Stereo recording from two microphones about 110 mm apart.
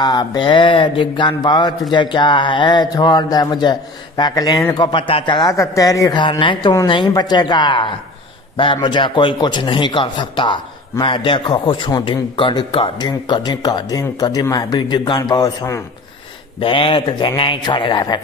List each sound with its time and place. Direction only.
0.0 s a man's voice: 40° left (ahead or behind)
5.5 s speech: 30° left (ahead or behind)
6.4 s a man's voice: 45° left (ahead or behind)
16.5 s a man's voice: 55° left (ahead or behind)